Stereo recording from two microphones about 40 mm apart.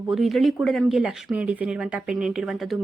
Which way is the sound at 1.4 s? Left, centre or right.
Right.